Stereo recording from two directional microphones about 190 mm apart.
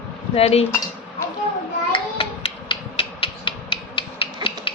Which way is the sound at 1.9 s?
25° left (ahead or behind).